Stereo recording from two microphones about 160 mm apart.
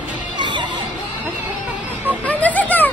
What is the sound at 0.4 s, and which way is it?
Music, 30° right (ahead or behind).